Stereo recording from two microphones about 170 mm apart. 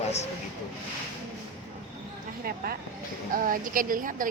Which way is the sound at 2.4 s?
60° right (ahead or behind).